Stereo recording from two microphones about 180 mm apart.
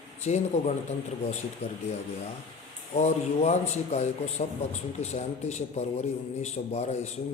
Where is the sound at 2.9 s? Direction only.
40° left (ahead or behind).